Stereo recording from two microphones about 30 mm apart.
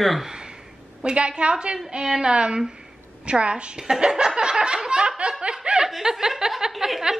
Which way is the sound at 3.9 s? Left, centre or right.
Right.